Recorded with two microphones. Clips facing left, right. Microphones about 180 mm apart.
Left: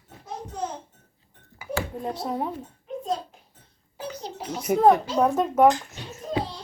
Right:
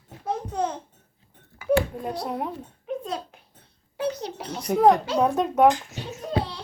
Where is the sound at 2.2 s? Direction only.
Centre (ahead or behind).